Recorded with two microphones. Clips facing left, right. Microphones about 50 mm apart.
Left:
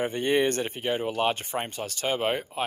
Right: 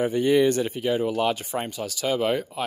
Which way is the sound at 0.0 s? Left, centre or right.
Left.